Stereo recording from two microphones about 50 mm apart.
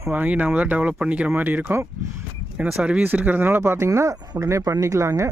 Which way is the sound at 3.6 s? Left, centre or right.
Right.